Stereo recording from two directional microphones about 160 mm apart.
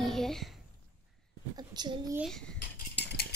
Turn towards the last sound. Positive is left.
turn(degrees=75)  # may be behind; listen again after turning